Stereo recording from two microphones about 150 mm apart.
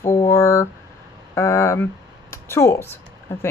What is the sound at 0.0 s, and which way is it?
Speech, 15° left (ahead or behind).